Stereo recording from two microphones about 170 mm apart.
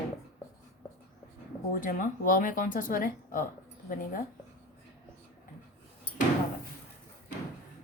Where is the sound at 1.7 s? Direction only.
55° left (ahead or behind).